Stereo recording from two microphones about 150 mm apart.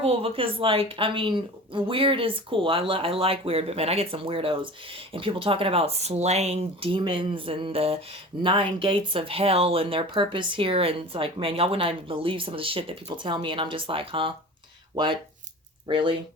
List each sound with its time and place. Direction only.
0.0 s speech: 40° right (ahead or behind)